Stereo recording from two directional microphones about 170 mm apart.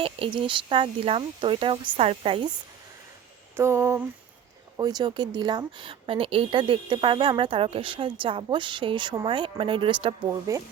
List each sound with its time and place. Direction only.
0.0 s speech: 30° right (ahead or behind)
3.6 s a sound: 15° right (ahead or behind)
4.8 s a woman's voice: 25° right (ahead or behind)
10.5 s a woman's voice: 20° right (ahead or behind)